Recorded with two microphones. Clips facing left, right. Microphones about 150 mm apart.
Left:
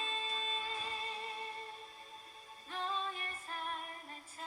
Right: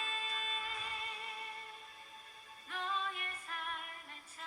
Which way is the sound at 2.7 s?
30° left (ahead or behind).